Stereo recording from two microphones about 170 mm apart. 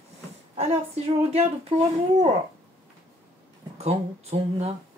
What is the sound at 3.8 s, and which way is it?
Speech, 40° right (ahead or behind).